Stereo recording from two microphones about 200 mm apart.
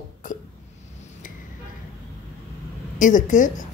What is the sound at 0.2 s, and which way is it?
Hiccup, 40° left (ahead or behind).